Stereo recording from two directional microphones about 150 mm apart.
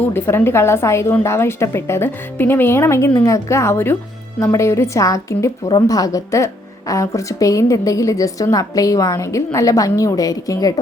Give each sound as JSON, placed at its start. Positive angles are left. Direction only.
{"t": 0.0, "sound": "a woman's voice", "side_deg": 15}